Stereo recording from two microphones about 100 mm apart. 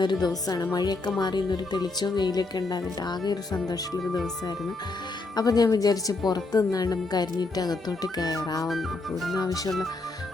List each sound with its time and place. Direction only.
0.0 s speech: 45° left (ahead or behind)
5.3 s speech: 40° left (ahead or behind)
8.6 s music: centre (ahead or behind)
9.4 s speech: 35° left (ahead or behind)
9.6 s music: centre (ahead or behind)